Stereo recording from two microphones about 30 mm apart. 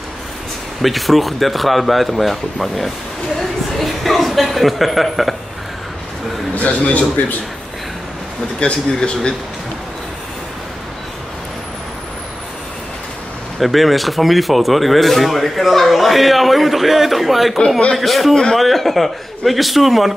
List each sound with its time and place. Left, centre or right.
0.8 s speech: centre
3.3 s a sound: centre
4.5 s speech: centre
6.5 s a man's voice: left
8.5 s a man's voice: left
13.6 s speech: centre
18.3 s a man's voice: centre
18.6 s speech: centre